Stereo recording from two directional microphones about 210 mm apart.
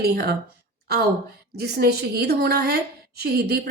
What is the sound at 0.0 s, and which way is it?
Speech, 50° right (ahead or behind).